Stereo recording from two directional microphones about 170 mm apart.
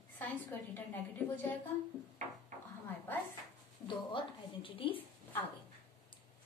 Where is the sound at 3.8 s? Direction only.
30° left (ahead or behind).